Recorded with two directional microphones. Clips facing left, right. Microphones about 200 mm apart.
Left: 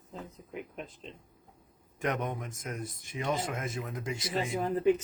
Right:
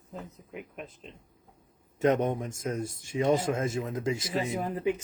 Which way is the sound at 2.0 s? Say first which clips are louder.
Right 8 dB; 25° right (ahead or behind).